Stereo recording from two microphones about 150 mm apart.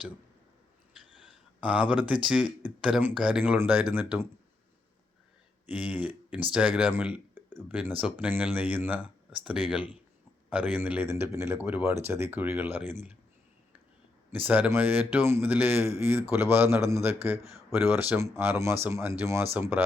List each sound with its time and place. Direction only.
1.2 s speech: 10° right (ahead or behind)
5.6 s speech: 10° right (ahead or behind)
14.3 s speech: 10° right (ahead or behind)